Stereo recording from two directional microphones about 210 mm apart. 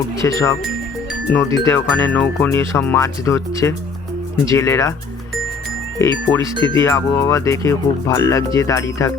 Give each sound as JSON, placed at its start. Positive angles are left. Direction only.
{"t": 0.2, "sound": "speech", "side_deg": 15}
{"t": 6.2, "sound": "speech", "side_deg": 15}
{"t": 6.5, "sound": "speech", "side_deg": -20}
{"t": 6.7, "sound": "speech", "side_deg": 15}